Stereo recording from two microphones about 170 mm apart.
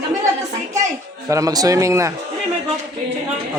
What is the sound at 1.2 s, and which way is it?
Speech, 20° right (ahead or behind).